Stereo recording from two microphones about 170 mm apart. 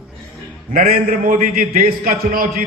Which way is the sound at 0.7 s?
55° right (ahead or behind).